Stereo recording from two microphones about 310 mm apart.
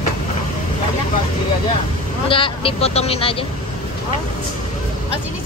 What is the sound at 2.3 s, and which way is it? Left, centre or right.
Speech, centre.